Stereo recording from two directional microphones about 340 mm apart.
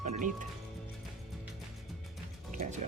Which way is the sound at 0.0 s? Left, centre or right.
Right.